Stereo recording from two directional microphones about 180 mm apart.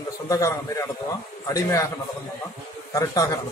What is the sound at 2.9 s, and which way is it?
Speech, 15° left (ahead or behind).